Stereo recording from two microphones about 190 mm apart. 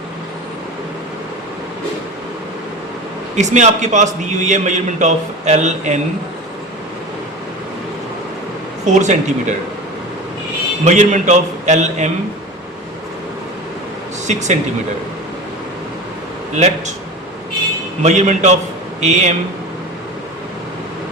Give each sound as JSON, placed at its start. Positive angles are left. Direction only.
{"t": 3.3, "sound": "a man's voice", "side_deg": -40}
{"t": 8.8, "sound": "a man's voice", "side_deg": -40}
{"t": 10.8, "sound": "a man's voice", "side_deg": -40}
{"t": 14.3, "sound": "a man's voice", "side_deg": -40}
{"t": 16.6, "sound": "a man's voice", "side_deg": -35}
{"t": 18.0, "sound": "a man's voice", "side_deg": -35}